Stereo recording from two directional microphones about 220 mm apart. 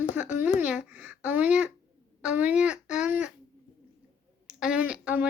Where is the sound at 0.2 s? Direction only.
10° right (ahead or behind).